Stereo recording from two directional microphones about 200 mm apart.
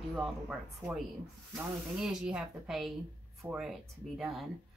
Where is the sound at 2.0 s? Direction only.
5° right (ahead or behind).